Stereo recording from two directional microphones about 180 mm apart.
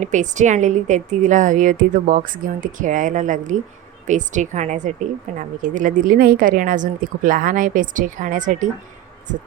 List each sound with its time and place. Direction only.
0.0 s speech: 45° right (ahead or behind)